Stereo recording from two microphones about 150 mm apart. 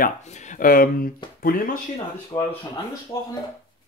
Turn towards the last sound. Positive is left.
turn(degrees=20)  # may be behind; listen again after turning